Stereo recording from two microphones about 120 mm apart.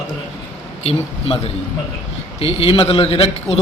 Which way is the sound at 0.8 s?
55° left (ahead or behind).